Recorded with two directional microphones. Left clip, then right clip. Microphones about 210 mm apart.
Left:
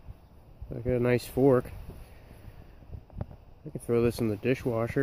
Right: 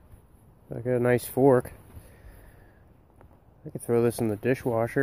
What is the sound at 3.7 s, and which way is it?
Speech, centre (ahead or behind).